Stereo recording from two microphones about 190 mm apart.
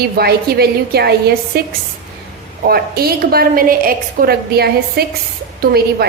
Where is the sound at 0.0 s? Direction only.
55° right (ahead or behind).